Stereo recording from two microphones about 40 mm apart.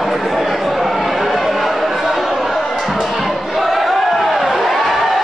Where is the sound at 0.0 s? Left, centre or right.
Centre.